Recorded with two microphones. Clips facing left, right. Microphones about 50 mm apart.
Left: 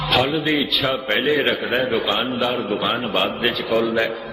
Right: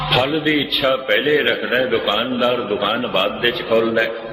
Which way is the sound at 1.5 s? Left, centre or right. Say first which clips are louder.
Right 3 dB; centre.